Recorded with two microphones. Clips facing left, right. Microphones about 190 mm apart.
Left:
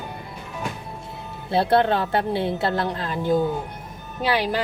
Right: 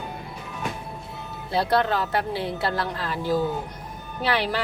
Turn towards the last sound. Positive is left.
turn(degrees=10)  # may be behind; listen again after turning